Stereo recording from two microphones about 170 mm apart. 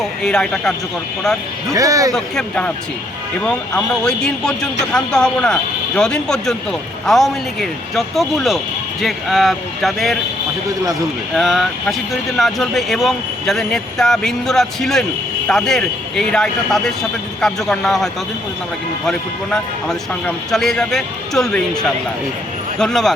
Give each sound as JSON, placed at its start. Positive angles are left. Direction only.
{"t": 0.0, "sound": "speech", "side_deg": 5}
{"t": 1.7, "sound": "speech", "side_deg": -20}
{"t": 2.1, "sound": "speech", "side_deg": 5}
{"t": 11.3, "sound": "speech", "side_deg": 0}